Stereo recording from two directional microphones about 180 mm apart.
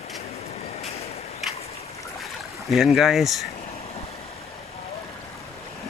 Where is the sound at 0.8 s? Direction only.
35° left (ahead or behind).